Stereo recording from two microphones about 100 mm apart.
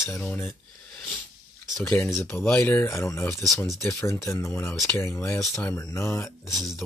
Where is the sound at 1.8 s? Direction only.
20° left (ahead or behind).